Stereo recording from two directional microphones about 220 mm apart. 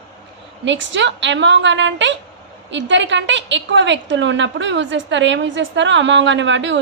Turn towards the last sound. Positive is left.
turn(degrees=-55)  # may be behind; listen again after turning